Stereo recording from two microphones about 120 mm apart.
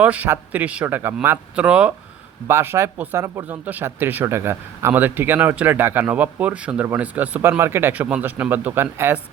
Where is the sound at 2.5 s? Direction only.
20° right (ahead or behind).